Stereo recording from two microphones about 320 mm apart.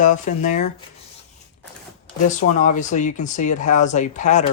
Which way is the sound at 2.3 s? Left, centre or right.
Left.